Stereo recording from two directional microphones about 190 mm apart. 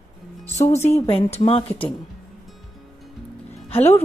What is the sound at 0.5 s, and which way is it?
Speech, 35° left (ahead or behind).